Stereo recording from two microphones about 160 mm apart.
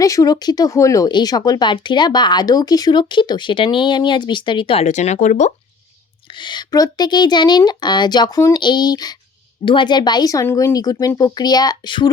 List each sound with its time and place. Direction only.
0.0 s speech: 20° left (ahead or behind); by 5.5 s 50° left (ahead or behind)
6.4 s speech: 25° left (ahead or behind)